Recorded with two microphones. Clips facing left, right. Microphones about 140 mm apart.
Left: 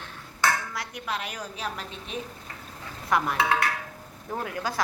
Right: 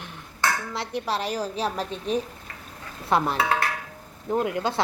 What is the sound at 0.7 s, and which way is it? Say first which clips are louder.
A woman's voice: right 5 dB; 30° right (ahead or behind).